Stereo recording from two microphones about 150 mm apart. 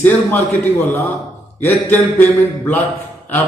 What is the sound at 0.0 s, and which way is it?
Speech, 10° left (ahead or behind).